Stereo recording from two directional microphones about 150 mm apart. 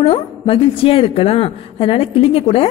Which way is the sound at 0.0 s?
40° left (ahead or behind).